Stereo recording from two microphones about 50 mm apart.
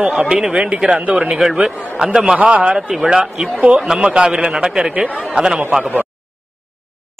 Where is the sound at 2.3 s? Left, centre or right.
Right.